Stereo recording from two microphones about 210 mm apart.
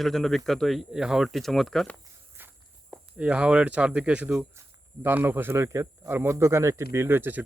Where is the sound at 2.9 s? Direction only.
5° right (ahead or behind).